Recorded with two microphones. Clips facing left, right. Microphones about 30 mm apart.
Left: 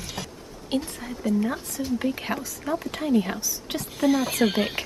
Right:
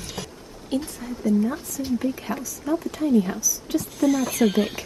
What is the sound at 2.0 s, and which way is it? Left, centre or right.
Speech, left.